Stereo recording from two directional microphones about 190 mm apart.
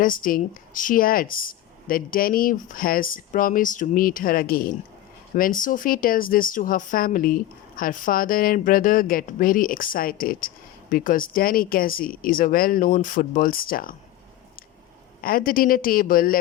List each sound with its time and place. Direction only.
0.0 s speech: 45° left (ahead or behind)
15.2 s speech: 50° left (ahead or behind)